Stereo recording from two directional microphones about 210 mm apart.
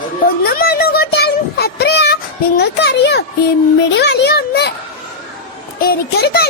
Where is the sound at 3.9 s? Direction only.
55° left (ahead or behind).